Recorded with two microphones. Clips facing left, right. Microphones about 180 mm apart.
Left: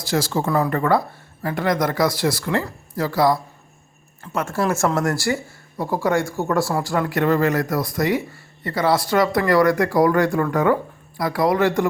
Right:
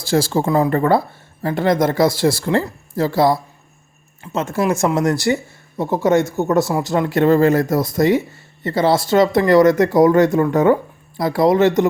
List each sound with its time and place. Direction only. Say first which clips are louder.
0.0 s speech: right 4 dB; 30° right (ahead or behind)